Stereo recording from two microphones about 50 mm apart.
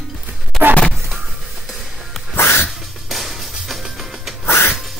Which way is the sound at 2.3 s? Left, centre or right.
Left.